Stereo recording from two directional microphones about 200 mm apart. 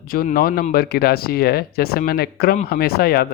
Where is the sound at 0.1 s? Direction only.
45° left (ahead or behind).